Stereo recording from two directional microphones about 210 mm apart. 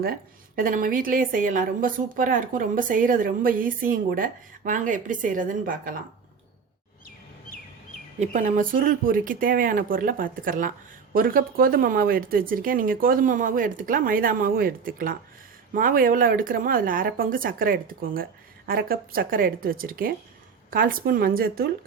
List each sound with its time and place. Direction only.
0.0 s speech: 45° right (ahead or behind)
8.2 s speech: 35° right (ahead or behind)